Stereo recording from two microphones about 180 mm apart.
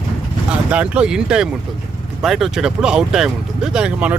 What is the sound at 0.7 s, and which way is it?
Speech, 5° right (ahead or behind).